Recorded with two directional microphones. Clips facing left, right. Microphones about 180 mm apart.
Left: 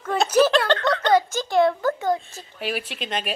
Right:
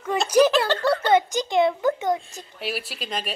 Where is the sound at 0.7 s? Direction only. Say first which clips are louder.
Even; 10° right (ahead or behind).